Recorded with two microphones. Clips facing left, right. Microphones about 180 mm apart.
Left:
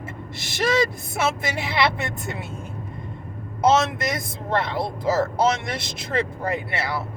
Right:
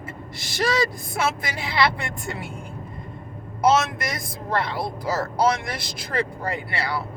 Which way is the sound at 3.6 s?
25° left (ahead or behind).